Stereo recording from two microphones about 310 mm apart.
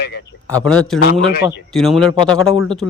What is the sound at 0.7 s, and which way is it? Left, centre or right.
Speech, centre.